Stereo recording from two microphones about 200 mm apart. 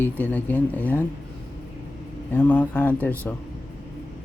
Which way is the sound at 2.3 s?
10° left (ahead or behind).